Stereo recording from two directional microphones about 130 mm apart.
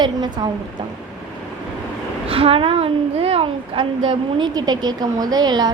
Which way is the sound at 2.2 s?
45° right (ahead or behind).